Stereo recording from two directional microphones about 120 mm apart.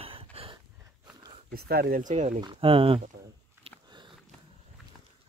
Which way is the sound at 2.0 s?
90° right.